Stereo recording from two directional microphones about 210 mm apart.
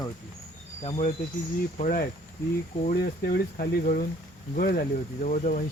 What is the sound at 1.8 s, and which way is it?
Speech, 40° left (ahead or behind).